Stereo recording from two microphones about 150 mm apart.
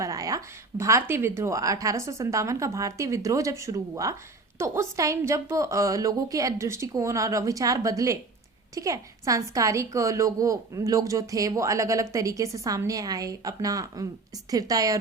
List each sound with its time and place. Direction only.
0.0 s a woman's voice: 20° right (ahead or behind)